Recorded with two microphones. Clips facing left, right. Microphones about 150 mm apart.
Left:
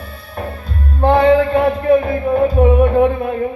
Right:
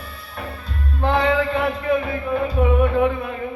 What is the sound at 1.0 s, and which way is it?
Music, 35° left (ahead or behind).